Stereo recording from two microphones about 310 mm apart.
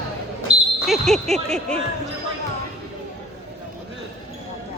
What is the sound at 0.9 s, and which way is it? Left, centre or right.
Speech, centre.